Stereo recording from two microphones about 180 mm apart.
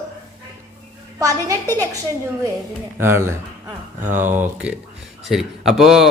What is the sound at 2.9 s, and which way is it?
Speech, 15° right (ahead or behind).